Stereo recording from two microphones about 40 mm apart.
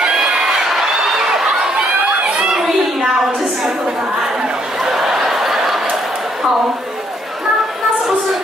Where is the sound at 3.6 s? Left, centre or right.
Centre.